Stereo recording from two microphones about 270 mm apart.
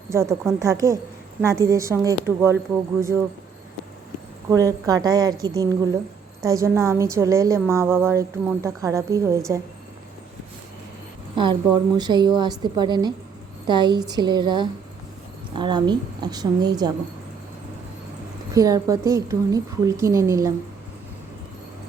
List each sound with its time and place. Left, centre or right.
0.1 s a woman's voice: centre
4.4 s a woman's voice: centre
11.3 s a woman's voice: centre
18.5 s a woman's voice: centre